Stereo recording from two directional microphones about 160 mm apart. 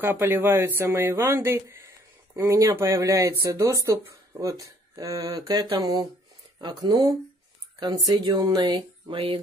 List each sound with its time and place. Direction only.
0.0 s speech: 15° right (ahead or behind); by 9.4 s 35° right (ahead or behind)